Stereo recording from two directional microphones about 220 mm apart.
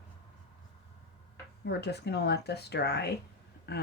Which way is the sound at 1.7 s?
50° left (ahead or behind).